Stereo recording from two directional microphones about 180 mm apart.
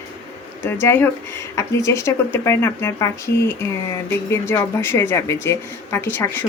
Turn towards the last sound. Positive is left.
turn(degrees=10)  # may be behind; listen again after turning